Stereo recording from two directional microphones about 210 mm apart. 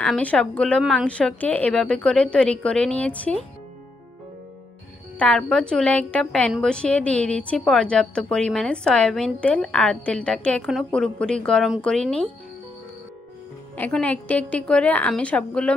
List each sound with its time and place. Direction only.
0.0 s a woman's voice: 5° left (ahead or behind)
5.2 s a woman's voice: 5° left (ahead or behind)
13.7 s a woman's voice: 5° left (ahead or behind)